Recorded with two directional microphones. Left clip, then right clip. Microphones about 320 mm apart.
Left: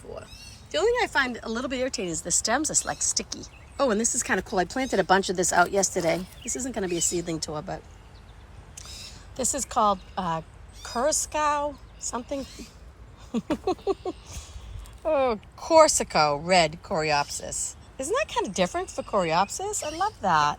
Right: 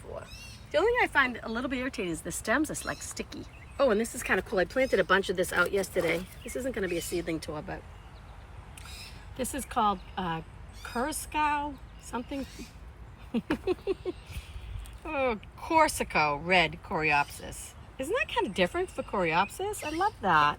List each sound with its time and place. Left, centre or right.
0.8 s speech: centre
9.3 s speech: centre
13.3 s speech: centre
17.5 s a woman's voice: left
18.1 s speech: centre